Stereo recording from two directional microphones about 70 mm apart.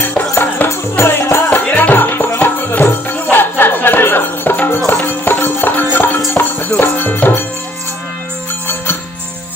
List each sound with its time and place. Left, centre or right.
0.7 s music: left